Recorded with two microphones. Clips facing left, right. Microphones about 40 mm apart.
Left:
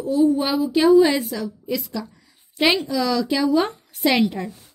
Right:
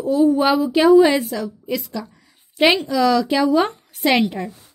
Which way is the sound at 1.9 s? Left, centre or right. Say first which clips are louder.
Right 1 dB; right.